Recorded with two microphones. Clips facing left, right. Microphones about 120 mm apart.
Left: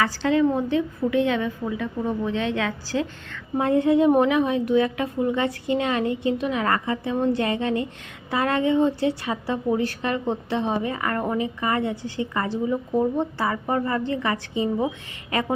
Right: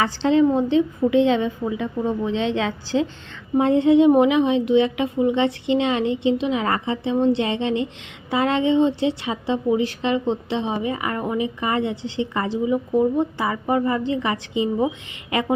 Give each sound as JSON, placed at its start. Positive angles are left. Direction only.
{"t": 0.0, "sound": "a woman's voice", "side_deg": -25}
{"t": 12.6, "sound": "a woman's voice", "side_deg": -10}